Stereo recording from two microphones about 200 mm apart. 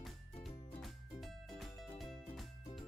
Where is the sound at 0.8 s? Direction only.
Centre (ahead or behind).